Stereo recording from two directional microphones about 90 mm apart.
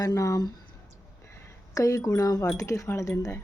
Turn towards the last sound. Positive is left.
turn(degrees=35)  # may be behind; listen again after turning